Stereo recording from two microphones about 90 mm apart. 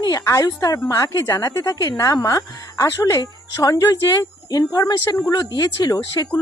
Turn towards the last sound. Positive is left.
turn(degrees=45)  # may be behind; listen again after turning